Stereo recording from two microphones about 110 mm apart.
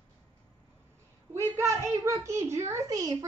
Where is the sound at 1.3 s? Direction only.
25° right (ahead or behind).